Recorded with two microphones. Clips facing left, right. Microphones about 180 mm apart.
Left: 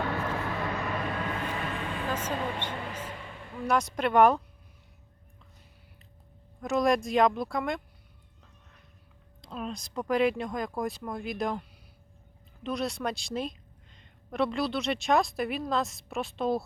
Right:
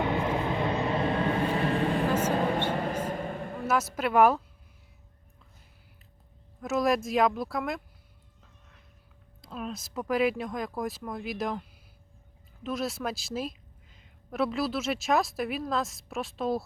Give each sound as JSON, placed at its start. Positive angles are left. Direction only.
{"t": 0.0, "sound": "a sound", "side_deg": -20}
{"t": 3.7, "sound": "a woman's voice", "side_deg": -5}
{"t": 6.6, "sound": "a woman's voice", "side_deg": 0}
{"t": 9.4, "sound": "a woman's voice", "side_deg": 0}
{"t": 12.6, "sound": "a woman's voice", "side_deg": 0}